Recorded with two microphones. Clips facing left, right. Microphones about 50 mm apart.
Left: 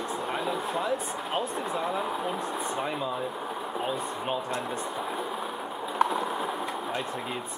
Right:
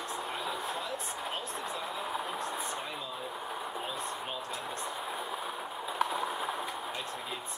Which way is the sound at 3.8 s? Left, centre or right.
Left.